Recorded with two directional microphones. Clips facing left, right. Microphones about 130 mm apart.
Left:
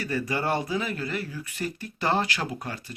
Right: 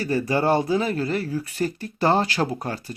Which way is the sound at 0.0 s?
30° right (ahead or behind).